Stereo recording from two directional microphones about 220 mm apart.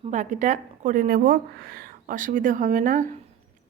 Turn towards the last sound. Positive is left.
turn(degrees=-35)  # may be behind; listen again after turning